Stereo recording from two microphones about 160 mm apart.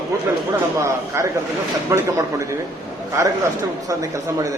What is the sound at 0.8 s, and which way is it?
Speech, 20° right (ahead or behind).